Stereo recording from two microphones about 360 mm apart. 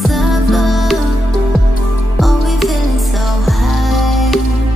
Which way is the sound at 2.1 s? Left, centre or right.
Centre.